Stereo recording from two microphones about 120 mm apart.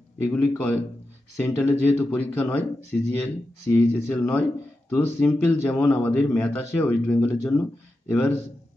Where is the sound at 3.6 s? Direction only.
20° left (ahead or behind).